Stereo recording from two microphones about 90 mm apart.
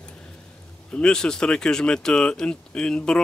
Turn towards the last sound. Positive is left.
turn(degrees=10)  # may be behind; listen again after turning